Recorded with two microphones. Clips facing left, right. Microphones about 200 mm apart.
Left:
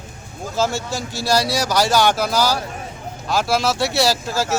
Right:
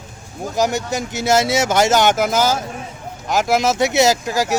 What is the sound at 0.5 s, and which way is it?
Speech, 15° right (ahead or behind).